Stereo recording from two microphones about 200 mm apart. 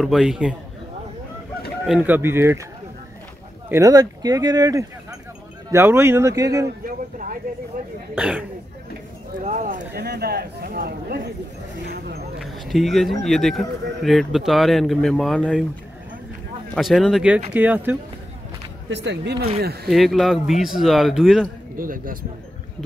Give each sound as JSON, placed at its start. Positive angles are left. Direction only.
{"t": 0.0, "sound": "speech", "side_deg": 0}
{"t": 1.9, "sound": "speech", "side_deg": -10}
{"t": 3.6, "sound": "speech", "side_deg": -15}
{"t": 8.2, "sound": "speech", "side_deg": -5}
{"t": 9.4, "sound": "speech", "side_deg": -40}
{"t": 9.9, "sound": "speech", "side_deg": -55}
{"t": 12.4, "sound": "speech", "side_deg": 0}
{"t": 16.7, "sound": "speech", "side_deg": 0}
{"t": 18.9, "sound": "speech", "side_deg": -60}
{"t": 19.9, "sound": "speech", "side_deg": 0}
{"t": 21.7, "sound": "speech", "side_deg": -45}